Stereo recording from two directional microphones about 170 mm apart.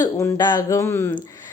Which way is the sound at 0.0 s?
25° left (ahead or behind).